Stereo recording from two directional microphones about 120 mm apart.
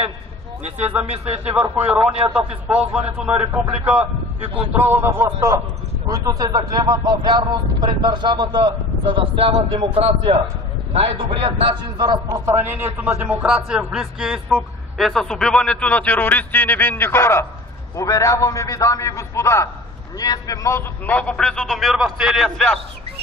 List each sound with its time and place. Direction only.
0.7 s speech: 65° right (ahead or behind)
1.5 s a man's voice: 15° right (ahead or behind); by 8.7 s 40° right (ahead or behind)
9.2 s a man's voice: 50° right (ahead or behind); by 12.4 s 35° right (ahead or behind)
12.4 s a man's voice: 20° right (ahead or behind); by 20.8 s 30° left (ahead or behind)
21.1 s a man's voice: 10° left (ahead or behind)